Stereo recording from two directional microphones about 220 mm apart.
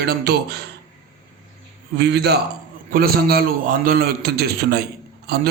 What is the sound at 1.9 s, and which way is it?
A man's voice, 50° right (ahead or behind).